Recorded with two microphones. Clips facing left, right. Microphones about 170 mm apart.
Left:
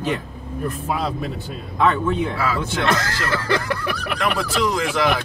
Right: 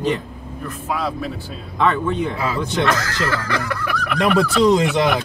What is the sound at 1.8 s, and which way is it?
Speech, 5° left (ahead or behind).